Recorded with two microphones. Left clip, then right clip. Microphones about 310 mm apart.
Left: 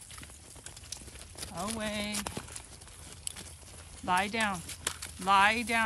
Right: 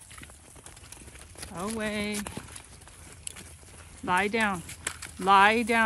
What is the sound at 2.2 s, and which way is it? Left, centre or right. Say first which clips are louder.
Horse: even; centre.